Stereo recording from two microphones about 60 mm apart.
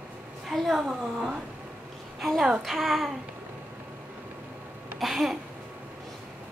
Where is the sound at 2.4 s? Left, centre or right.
Centre.